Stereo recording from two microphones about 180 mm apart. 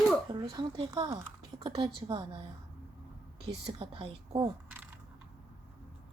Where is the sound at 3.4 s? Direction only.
30° right (ahead or behind).